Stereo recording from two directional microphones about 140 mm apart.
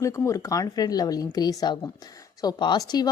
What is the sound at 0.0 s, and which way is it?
A woman's voice, 20° left (ahead or behind).